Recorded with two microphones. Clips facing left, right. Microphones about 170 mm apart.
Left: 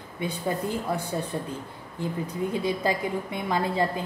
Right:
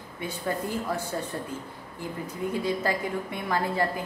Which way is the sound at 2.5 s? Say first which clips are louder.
Even; 20° left (ahead or behind).